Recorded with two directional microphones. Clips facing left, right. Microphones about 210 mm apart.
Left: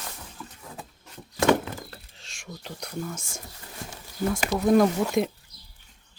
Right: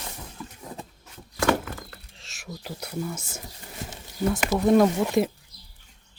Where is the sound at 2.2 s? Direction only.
Centre (ahead or behind).